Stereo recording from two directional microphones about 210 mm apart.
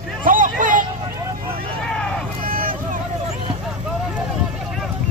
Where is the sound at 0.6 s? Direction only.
40° right (ahead or behind).